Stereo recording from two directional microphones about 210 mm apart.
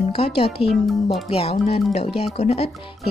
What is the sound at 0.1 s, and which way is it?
Speech, 30° left (ahead or behind).